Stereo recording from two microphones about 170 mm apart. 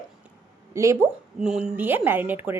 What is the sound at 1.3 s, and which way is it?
A woman's voice, 5° right (ahead or behind).